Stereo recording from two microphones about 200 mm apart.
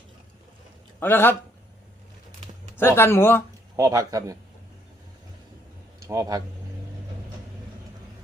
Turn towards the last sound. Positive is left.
turn(degrees=-15)  # may be behind; listen again after turning